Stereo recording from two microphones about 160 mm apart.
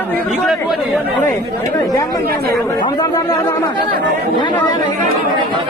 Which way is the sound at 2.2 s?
80° right.